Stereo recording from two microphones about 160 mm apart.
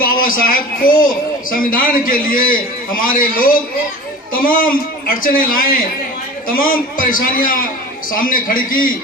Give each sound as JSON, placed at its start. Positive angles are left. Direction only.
{"t": 0.0, "sound": "a man's voice", "side_deg": 60}